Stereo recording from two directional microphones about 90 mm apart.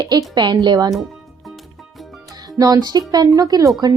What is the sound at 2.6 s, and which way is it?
A woman's voice, 45° right (ahead or behind).